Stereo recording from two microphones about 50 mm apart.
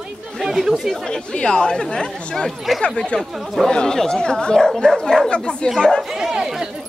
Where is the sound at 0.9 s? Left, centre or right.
Centre.